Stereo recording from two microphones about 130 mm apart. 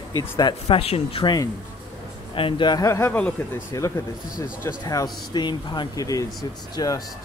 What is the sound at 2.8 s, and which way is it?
Speech, 20° left (ahead or behind).